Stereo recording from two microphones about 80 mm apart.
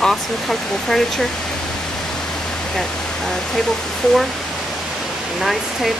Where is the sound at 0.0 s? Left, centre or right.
Centre.